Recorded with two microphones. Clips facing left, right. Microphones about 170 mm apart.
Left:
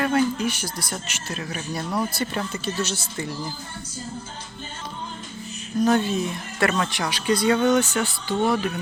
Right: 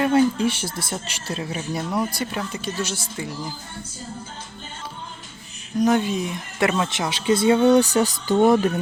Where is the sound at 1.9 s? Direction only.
10° right (ahead or behind).